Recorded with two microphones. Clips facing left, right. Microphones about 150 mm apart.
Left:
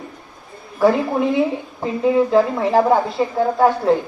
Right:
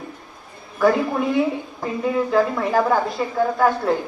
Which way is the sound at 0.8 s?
30° left (ahead or behind).